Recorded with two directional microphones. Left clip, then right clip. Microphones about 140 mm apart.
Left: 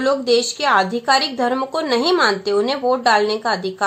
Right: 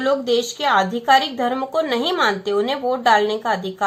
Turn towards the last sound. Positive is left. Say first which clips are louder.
# left 1 dB
turn(degrees=30)  # may be behind; listen again after turning